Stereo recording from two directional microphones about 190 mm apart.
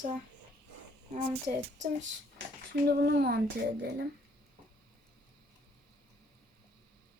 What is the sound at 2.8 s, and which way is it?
Speech, 60° right (ahead or behind).